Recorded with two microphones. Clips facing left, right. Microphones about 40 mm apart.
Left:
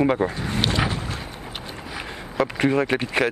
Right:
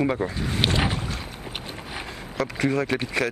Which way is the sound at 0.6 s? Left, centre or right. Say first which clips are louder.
Even; centre.